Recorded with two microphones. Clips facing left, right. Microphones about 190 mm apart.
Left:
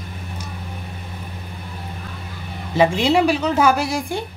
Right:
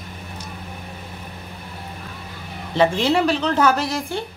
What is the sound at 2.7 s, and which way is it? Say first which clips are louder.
A woman's voice: left 2 dB; 10° left (ahead or behind).